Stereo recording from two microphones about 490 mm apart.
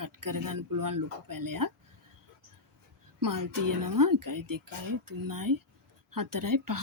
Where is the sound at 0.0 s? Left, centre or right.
Right.